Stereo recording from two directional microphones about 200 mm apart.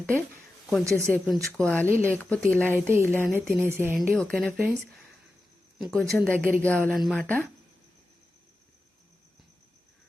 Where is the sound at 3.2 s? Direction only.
5° right (ahead or behind).